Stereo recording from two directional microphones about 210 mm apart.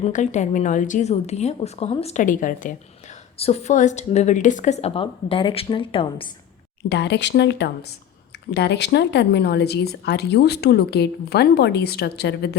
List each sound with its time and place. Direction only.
0.0 s a woman's voice: 35° left (ahead or behind)
6.8 s speech: 55° left (ahead or behind)